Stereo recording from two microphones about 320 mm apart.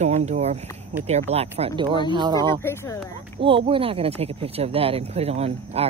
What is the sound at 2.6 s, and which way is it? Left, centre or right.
Speech, centre.